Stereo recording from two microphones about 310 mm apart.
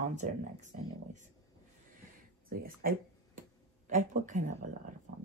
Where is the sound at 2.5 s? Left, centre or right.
Right.